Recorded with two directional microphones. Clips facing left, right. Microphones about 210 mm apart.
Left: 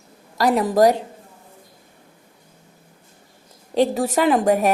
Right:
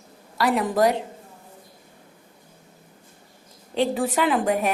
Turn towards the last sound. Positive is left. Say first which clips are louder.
# left 5 dB
turn(degrees=40)  # may be behind; listen again after turning